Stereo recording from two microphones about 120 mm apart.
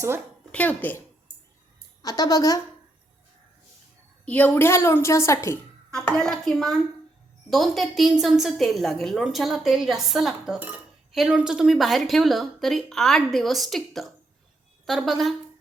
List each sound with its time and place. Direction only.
0.5 s speech: 15° left (ahead or behind)
2.0 s a woman's voice: 30° left (ahead or behind)
4.3 s a woman's voice: 10° left (ahead or behind)
5.9 s a woman's voice: 5° left (ahead or behind)